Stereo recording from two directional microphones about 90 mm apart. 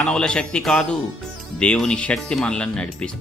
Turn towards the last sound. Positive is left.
turn(degrees=10)  # may be behind; listen again after turning